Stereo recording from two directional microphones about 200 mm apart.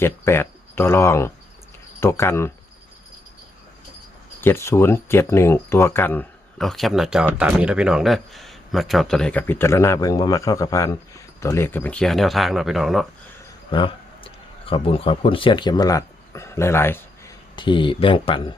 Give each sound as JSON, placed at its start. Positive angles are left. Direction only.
{"t": 0.0, "sound": "speech", "side_deg": 10}
{"t": 4.4, "sound": "speech", "side_deg": 10}
{"t": 13.7, "sound": "speech", "side_deg": 25}
{"t": 17.6, "sound": "speech", "side_deg": 25}